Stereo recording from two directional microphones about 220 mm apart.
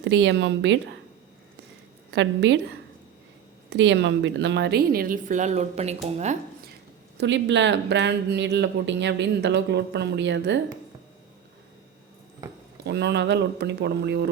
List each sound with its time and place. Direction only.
0.0 s speech: 55° right (ahead or behind)
2.0 s a woman's voice: 50° right (ahead or behind); by 6.3 s 30° right (ahead or behind)
7.2 s speech: 55° right (ahead or behind)
12.8 s speech: 50° right (ahead or behind)